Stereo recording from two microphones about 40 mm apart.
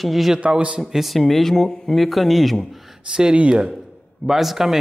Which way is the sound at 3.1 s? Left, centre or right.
Right.